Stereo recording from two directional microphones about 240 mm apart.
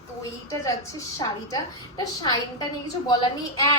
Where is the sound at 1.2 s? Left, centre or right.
Centre.